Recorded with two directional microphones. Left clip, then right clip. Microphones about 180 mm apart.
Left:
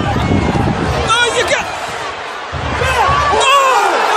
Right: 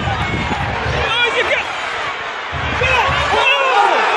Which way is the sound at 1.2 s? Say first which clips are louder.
Even; 10° left (ahead or behind).